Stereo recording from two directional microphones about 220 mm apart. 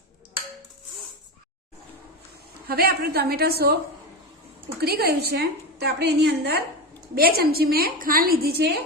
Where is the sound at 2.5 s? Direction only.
45° right (ahead or behind).